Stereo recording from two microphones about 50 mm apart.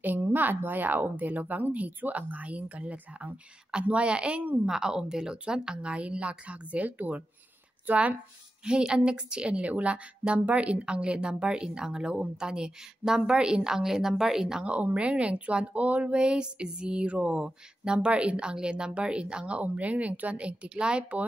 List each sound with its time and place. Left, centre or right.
0.0 s a woman's voice: right
4.6 s a woman's voice: centre; by 8.2 s right
8.6 s a woman's voice: centre
14.6 s speech: right